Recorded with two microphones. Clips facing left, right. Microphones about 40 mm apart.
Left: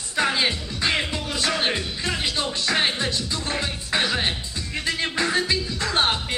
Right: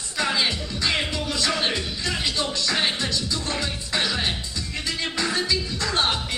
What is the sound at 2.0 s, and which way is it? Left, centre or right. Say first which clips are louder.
Music: even; left.